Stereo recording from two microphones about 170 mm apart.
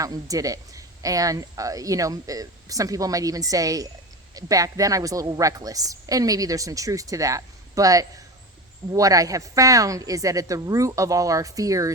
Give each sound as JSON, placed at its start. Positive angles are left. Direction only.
{"t": 0.0, "sound": "speech", "side_deg": -20}